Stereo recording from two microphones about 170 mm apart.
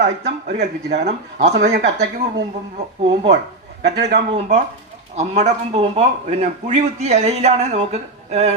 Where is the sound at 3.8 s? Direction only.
85° right.